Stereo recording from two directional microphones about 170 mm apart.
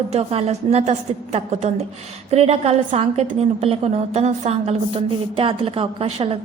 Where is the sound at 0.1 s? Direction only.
35° right (ahead or behind).